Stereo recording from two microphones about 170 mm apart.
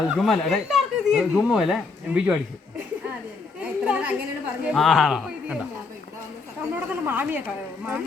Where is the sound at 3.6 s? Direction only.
5° right (ahead or behind).